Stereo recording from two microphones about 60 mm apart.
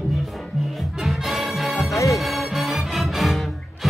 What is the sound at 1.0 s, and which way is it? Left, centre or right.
Music, centre.